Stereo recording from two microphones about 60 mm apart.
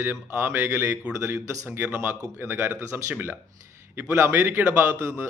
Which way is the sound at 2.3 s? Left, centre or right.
Right.